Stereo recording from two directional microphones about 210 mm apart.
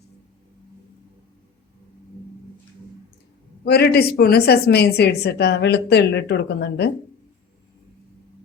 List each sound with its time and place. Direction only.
3.6 s speech: 50° left (ahead or behind)